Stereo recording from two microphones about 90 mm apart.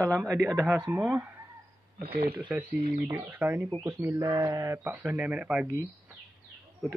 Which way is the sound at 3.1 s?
20° right (ahead or behind).